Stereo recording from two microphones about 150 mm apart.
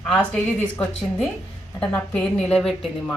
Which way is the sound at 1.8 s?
10° left (ahead or behind).